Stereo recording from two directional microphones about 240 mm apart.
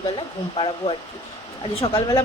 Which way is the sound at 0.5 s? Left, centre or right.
Left.